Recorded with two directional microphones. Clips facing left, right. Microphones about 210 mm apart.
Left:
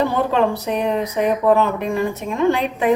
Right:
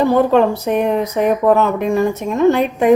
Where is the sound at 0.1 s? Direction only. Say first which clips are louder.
Right 6 dB; 45° right (ahead or behind).